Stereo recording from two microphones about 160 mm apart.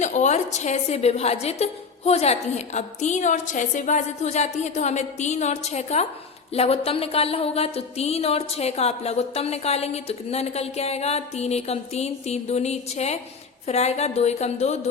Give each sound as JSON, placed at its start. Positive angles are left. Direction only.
{"t": 0.0, "sound": "a woman's voice", "side_deg": 45}
{"t": 6.5, "sound": "a sound", "side_deg": 40}
{"t": 13.7, "sound": "a woman's voice", "side_deg": 45}